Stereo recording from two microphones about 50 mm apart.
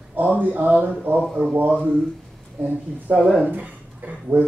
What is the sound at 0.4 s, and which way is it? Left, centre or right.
Speech, right.